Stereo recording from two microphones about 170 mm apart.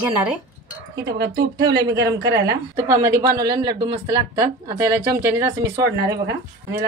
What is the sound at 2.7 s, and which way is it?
Speech, 20° right (ahead or behind).